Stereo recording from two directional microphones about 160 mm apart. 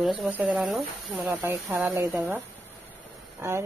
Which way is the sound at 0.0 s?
10° right (ahead or behind).